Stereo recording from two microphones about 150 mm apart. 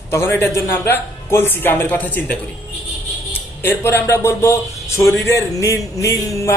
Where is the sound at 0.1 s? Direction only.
15° left (ahead or behind).